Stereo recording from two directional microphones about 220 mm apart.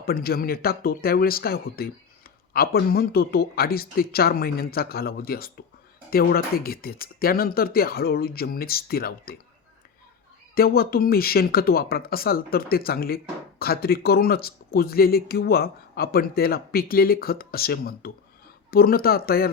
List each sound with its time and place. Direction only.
0.0 s speech: 45° left (ahead or behind)
10.5 s speech: 45° left (ahead or behind)